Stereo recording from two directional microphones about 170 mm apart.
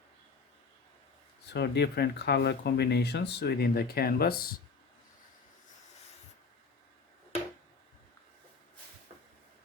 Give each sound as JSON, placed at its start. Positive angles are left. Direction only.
{"t": 1.5, "sound": "speech", "side_deg": 75}